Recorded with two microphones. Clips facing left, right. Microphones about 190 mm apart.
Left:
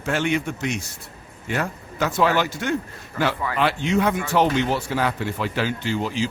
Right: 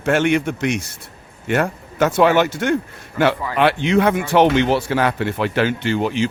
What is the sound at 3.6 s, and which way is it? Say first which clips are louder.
Speech: right 5 dB; 70° right (ahead or behind).